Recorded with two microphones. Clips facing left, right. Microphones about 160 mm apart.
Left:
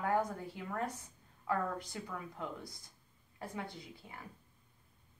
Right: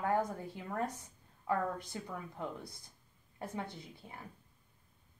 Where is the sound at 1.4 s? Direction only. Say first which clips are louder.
Right 1 dB; 25° right (ahead or behind).